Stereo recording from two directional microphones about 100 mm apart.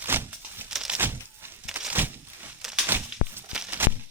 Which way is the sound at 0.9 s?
20° right (ahead or behind).